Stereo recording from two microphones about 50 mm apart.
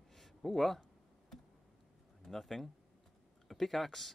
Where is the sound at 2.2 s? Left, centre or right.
Centre.